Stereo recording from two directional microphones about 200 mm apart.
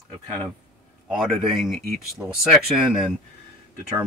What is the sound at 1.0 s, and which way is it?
Speech, centre (ahead or behind).